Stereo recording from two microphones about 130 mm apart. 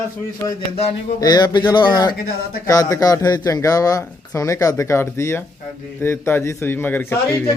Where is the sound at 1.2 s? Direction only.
30° left (ahead or behind).